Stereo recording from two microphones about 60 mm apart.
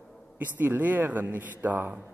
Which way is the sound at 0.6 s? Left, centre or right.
Right.